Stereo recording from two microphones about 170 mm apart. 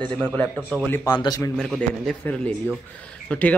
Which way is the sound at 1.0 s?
20° left (ahead or behind).